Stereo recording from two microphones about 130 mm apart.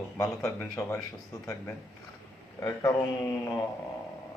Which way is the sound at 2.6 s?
20° left (ahead or behind).